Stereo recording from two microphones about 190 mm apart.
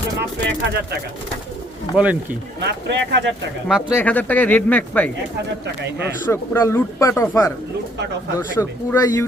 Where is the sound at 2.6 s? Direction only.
60° right (ahead or behind).